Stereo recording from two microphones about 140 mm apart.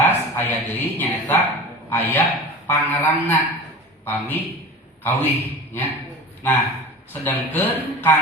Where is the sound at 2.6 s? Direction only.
15° left (ahead or behind).